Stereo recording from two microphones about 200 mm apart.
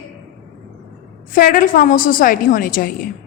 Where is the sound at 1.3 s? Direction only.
45° left (ahead or behind).